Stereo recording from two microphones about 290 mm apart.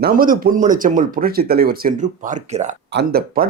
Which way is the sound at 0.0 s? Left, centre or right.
Right.